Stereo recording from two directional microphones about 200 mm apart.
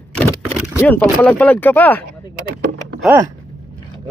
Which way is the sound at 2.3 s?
50° right (ahead or behind).